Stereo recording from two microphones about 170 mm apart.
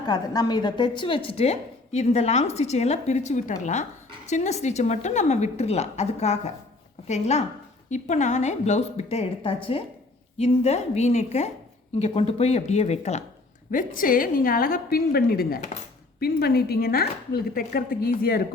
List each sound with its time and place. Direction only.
0.0 s speech: 25° left (ahead or behind); by 13.2 s 40° left (ahead or behind)
13.7 s speech: 55° left (ahead or behind)